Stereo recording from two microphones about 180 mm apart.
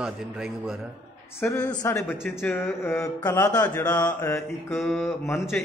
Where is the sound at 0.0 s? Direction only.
5° right (ahead or behind).